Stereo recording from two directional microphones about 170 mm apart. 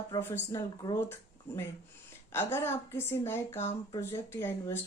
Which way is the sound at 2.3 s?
15° left (ahead or behind).